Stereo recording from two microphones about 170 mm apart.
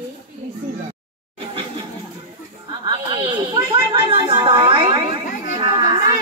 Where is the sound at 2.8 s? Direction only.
30° right (ahead or behind).